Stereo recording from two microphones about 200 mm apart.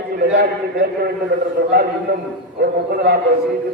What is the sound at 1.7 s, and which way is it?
A man's voice, 50° right (ahead or behind).